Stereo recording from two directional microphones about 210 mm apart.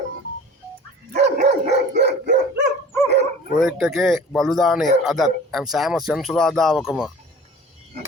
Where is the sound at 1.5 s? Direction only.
50° right (ahead or behind).